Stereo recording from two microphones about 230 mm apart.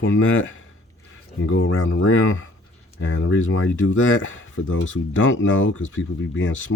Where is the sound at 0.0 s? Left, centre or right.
Left.